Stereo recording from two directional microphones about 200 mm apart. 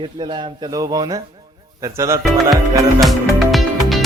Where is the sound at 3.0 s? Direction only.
Centre (ahead or behind).